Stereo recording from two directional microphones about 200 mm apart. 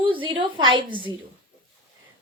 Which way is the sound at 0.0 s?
25° right (ahead or behind).